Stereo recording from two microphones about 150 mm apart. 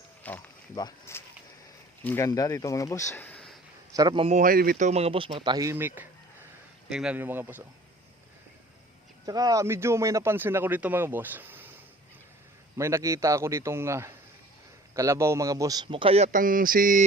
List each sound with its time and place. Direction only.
0.2 s a sound: 10° left (ahead or behind)
1.1 s speech: 15° left (ahead or behind)
3.9 s speech: 30° right (ahead or behind)
4.4 s a sound: 70° right (ahead or behind)
4.9 s speech: 45° right (ahead or behind); by 5.7 s 25° right (ahead or behind)
5.7 s speech: 15° right (ahead or behind)
9.2 s speech: 25° right (ahead or behind)
12.7 s a man's voice: 20° right (ahead or behind); by 16.4 s 45° right (ahead or behind)
16.4 s a sound: 65° right (ahead or behind)